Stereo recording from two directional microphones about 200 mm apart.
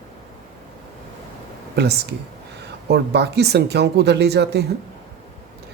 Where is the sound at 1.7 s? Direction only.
55° right (ahead or behind).